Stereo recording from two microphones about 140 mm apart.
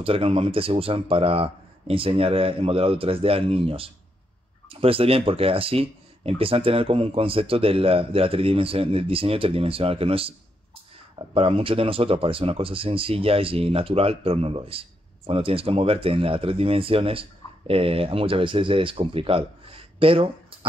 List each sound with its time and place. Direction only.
0.0 s speech: 40° right (ahead or behind)